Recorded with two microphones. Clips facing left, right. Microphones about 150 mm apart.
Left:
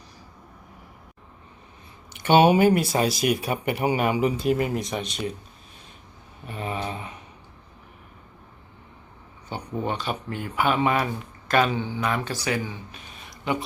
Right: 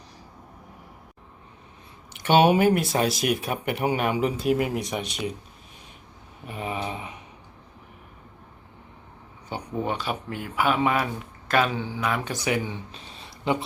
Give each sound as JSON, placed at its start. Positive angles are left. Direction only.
{"t": 2.1, "sound": "speech", "side_deg": 0}
{"t": 6.4, "sound": "a sound", "side_deg": -10}
{"t": 9.5, "sound": "speech", "side_deg": -5}
{"t": 12.3, "sound": "speech", "side_deg": -20}